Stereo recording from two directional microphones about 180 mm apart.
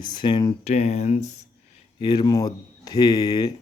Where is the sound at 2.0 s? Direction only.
25° left (ahead or behind).